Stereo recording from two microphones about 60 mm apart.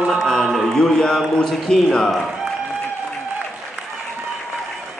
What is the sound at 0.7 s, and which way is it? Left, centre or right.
A man's voice, centre.